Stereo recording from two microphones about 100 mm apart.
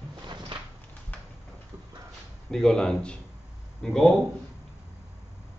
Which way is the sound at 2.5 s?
5° left (ahead or behind).